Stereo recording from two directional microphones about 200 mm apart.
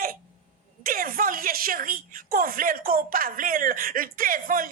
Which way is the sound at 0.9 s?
45° right (ahead or behind).